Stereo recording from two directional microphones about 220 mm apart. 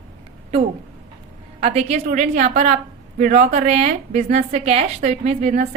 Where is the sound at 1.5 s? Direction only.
30° right (ahead or behind).